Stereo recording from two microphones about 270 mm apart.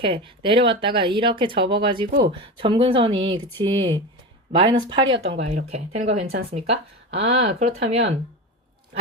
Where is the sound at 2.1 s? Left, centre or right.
Right.